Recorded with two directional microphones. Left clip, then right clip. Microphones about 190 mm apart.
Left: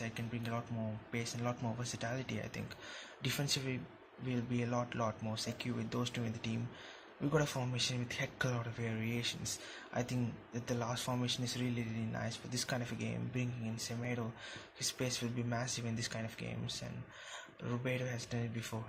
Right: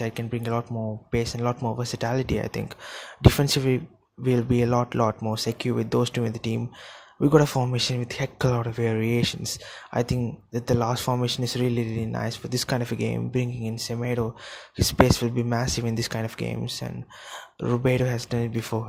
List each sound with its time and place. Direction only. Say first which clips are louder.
0.0 s speech: right 13 dB; 40° right (ahead or behind)